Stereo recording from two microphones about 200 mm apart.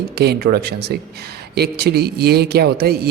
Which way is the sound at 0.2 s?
50° right (ahead or behind).